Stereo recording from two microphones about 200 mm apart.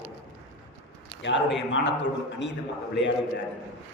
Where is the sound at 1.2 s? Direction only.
65° left (ahead or behind).